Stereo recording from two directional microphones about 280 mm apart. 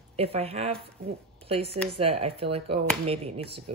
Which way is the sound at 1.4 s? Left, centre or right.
Right.